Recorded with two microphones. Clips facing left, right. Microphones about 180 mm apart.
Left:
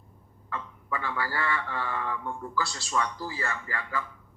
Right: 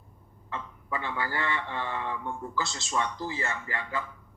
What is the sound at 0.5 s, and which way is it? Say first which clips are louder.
Speech: even; 20° right (ahead or behind).